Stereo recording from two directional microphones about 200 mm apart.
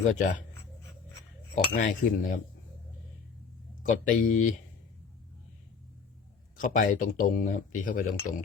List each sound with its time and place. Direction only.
0.0 s speech: 40° left (ahead or behind)
1.5 s speech: 40° left (ahead or behind)
3.8 s speech: 40° left (ahead or behind)
6.6 s speech: 40° left (ahead or behind)